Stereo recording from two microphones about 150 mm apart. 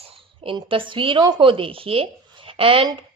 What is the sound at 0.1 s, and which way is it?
Speech, 35° right (ahead or behind).